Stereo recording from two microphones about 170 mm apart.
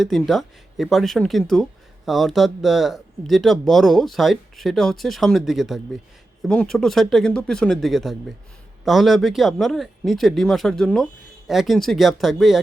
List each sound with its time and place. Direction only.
0.0 s speech: centre (ahead or behind)